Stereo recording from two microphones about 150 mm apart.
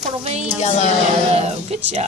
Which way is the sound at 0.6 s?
50° left (ahead or behind).